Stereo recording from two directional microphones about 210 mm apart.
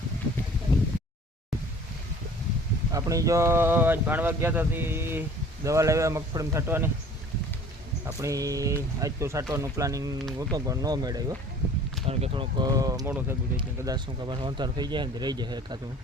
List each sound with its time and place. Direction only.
2.9 s speech: 15° right (ahead or behind)
8.0 s speech: 15° right (ahead or behind)